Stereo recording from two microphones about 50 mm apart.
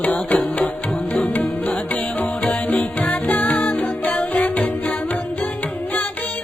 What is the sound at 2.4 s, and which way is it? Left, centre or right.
Music, centre.